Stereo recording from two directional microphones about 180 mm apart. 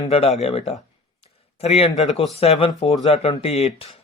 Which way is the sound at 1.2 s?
35° left (ahead or behind).